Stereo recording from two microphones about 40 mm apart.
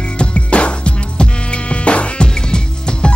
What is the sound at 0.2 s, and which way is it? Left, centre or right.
Music, left.